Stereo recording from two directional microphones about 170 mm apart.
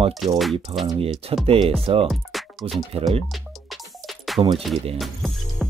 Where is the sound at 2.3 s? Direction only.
Centre (ahead or behind).